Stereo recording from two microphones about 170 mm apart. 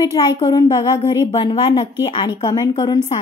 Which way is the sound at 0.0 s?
20° left (ahead or behind).